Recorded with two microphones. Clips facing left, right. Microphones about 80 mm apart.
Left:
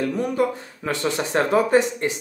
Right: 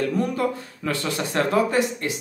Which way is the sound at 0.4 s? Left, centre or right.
Left.